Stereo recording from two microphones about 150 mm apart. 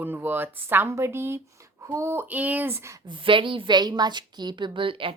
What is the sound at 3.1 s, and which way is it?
A woman's voice, 35° right (ahead or behind).